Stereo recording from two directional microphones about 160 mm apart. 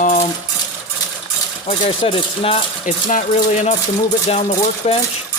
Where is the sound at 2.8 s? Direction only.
55° left (ahead or behind).